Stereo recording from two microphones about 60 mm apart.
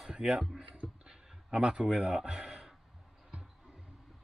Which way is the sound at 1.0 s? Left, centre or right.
Centre.